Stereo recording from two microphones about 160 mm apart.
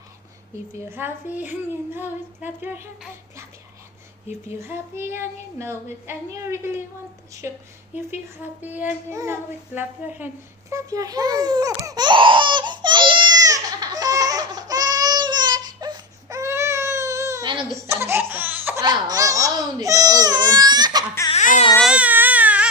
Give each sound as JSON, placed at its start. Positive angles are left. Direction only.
{"t": 0.9, "sound": "speech", "side_deg": -15}
{"t": 4.4, "sound": "speech", "side_deg": -15}
{"t": 10.7, "sound": "babbling", "side_deg": -20}
{"t": 17.8, "sound": "laughter", "side_deg": -15}
{"t": 18.8, "sound": "baby cry", "side_deg": -25}
{"t": 21.3, "sound": "baby cry", "side_deg": 50}
{"t": 21.8, "sound": "baby cry", "side_deg": -10}